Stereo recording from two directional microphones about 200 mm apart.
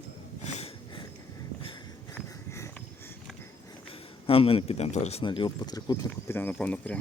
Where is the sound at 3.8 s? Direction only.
25° left (ahead or behind).